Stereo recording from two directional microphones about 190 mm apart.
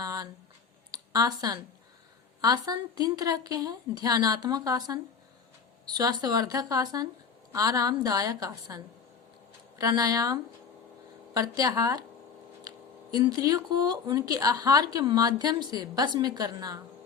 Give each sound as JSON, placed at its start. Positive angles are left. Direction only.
{"t": 0.0, "sound": "a sound", "side_deg": -20}
{"t": 2.4, "sound": "speech", "side_deg": -20}
{"t": 6.0, "sound": "speech", "side_deg": -20}
{"t": 11.3, "sound": "speech", "side_deg": -20}